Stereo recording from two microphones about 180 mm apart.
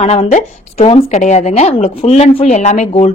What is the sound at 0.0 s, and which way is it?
Speech, 35° left (ahead or behind).